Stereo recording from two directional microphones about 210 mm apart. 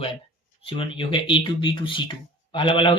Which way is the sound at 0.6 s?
25° left (ahead or behind).